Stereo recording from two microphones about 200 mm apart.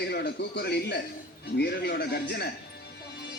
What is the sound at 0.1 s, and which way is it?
A man's voice, 55° left (ahead or behind).